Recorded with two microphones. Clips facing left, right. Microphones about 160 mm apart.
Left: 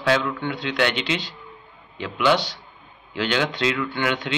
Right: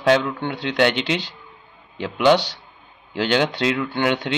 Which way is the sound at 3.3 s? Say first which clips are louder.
Right 3 dB; 50° right (ahead or behind).